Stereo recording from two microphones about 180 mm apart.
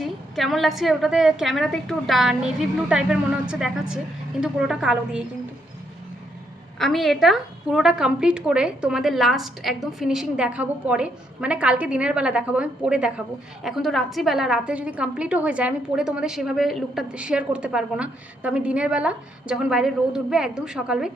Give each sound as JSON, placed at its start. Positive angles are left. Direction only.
{"t": 0.0, "sound": "a woman's voice", "side_deg": 0}
{"t": 6.7, "sound": "a woman's voice", "side_deg": 0}